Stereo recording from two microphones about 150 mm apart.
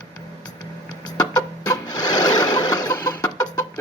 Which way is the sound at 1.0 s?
25° left (ahead or behind).